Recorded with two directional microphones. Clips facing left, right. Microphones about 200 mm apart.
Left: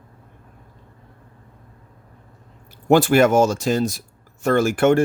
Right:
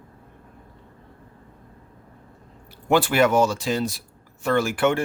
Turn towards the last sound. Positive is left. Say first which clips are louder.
# left 5 dB
turn(degrees=45)  # may be behind; listen again after turning